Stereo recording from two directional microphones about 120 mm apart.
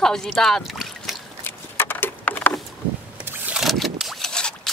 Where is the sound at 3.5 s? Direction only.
Centre (ahead or behind).